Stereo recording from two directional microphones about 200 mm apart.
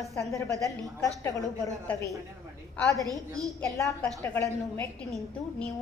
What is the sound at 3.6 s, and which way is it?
A woman's voice, 10° left (ahead or behind).